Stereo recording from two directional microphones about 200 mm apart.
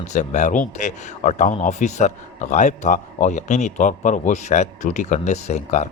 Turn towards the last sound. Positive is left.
turn(degrees=35)  # may be behind; listen again after turning